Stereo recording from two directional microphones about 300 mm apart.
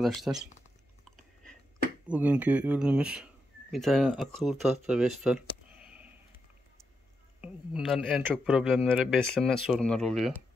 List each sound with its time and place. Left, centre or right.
0.0 s speech: centre
2.0 s speech: centre
5.9 s sniff: centre
7.4 s speech: centre